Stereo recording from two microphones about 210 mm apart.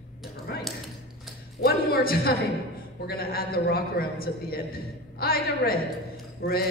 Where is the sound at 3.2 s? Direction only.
45° left (ahead or behind).